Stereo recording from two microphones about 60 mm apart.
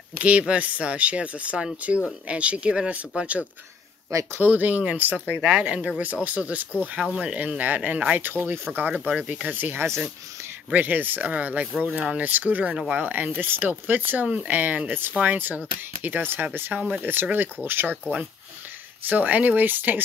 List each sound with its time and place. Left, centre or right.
0.2 s speech: right
4.5 s speech: right
7.0 s speech: centre
7.3 s speech: right
8.7 s speech: centre
9.1 s speech: centre
9.8 s speech: right
10.7 s speech: right
12.9 s speech: right
19.0 s speech: right